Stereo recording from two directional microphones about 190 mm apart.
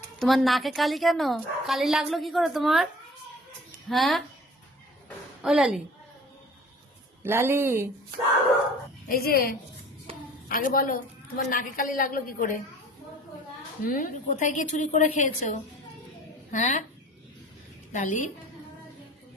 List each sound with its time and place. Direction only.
0.2 s speech: centre (ahead or behind)
5.4 s a woman's voice: centre (ahead or behind)
7.2 s speech: 10° right (ahead or behind)
9.0 s a woman's voice: 50° left (ahead or behind)
13.8 s a woman's voice: 45° left (ahead or behind)
17.9 s a woman's voice: 40° left (ahead or behind)